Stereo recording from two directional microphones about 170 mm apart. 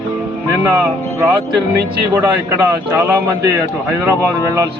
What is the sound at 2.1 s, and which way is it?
A man's voice, 15° right (ahead or behind).